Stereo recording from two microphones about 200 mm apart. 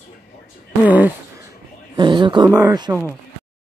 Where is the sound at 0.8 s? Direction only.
10° right (ahead or behind).